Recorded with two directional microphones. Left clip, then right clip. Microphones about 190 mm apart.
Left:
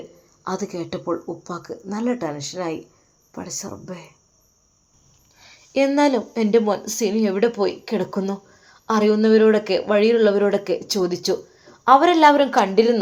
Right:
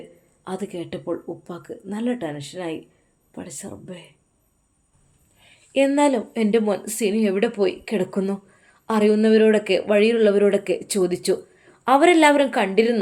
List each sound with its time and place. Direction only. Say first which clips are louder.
0.4 s speech: left 3 dB; centre (ahead or behind)
5.4 s speech: even; centre (ahead or behind)
11.9 s speech: even; 25° right (ahead or behind)
12.5 s speech: left 3 dB; 5° right (ahead or behind)